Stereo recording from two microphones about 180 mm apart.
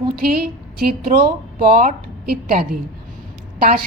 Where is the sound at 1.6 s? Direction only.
45° right (ahead or behind).